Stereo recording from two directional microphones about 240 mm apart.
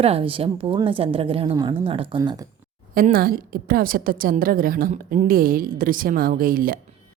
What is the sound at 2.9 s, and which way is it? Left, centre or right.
A woman's voice, right.